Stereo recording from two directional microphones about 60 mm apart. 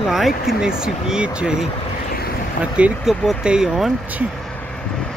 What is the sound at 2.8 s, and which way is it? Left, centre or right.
Speech, right.